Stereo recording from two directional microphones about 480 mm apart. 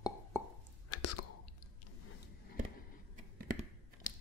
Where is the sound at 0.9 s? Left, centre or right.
Left.